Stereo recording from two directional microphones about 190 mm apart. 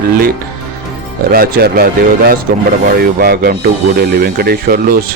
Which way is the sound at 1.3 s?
55° right (ahead or behind).